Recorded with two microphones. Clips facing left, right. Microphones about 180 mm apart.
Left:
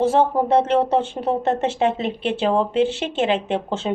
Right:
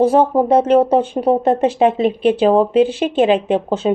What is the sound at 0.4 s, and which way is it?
Speech, 15° right (ahead or behind).